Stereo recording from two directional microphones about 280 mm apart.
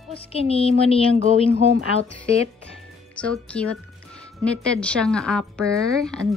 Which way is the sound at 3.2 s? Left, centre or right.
Centre.